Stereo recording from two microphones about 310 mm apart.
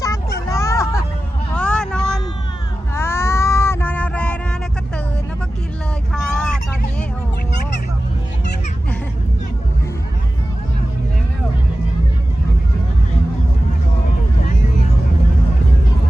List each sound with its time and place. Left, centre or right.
0.3 s hubbub: centre
1.5 s vehicle: centre
2.9 s a sound: centre
6.1 s vehicle: centre